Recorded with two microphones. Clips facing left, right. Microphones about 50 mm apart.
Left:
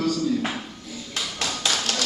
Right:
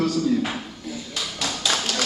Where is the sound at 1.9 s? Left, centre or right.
Left.